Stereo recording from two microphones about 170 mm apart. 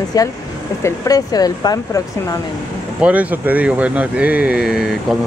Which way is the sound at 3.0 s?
10° right (ahead or behind).